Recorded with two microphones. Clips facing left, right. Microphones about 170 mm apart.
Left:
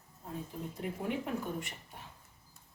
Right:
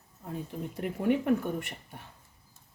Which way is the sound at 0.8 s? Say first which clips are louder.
Right 9 dB; 65° right (ahead or behind).